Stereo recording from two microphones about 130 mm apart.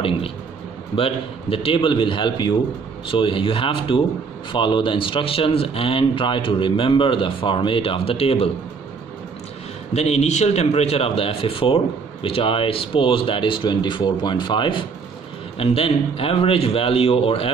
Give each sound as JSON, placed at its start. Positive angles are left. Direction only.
{"t": 0.9, "sound": "speech", "side_deg": 45}
{"t": 9.9, "sound": "speech", "side_deg": 55}
{"t": 15.6, "sound": "speech", "side_deg": 50}